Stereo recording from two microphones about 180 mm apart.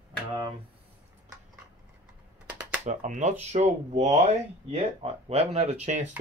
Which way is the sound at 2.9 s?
40° right (ahead or behind).